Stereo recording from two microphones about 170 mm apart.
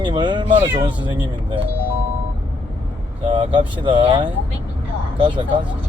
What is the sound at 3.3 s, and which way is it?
Speech, 30° right (ahead or behind).